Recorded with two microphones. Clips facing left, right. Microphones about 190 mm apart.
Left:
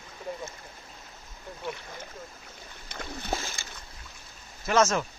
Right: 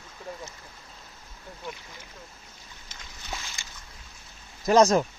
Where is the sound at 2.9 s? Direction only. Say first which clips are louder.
Left 11 dB; 60° left (ahead or behind).